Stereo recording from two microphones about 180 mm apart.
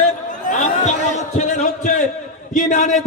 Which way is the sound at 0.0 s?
45° left (ahead or behind).